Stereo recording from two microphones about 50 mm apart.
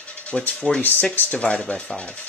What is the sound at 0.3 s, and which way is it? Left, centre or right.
Ratchet, left.